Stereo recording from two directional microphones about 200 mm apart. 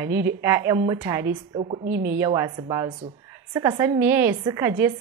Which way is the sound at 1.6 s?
30° right (ahead or behind).